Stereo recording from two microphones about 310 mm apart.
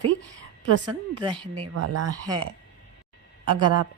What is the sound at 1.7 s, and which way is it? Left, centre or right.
Speech, right.